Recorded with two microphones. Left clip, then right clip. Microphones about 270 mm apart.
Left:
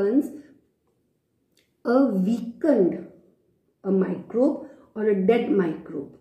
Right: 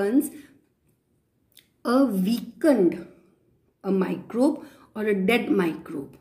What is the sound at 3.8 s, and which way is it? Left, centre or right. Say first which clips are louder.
A woman's voice: left 1 dB; right.